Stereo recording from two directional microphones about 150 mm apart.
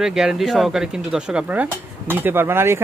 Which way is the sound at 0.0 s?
5° right (ahead or behind).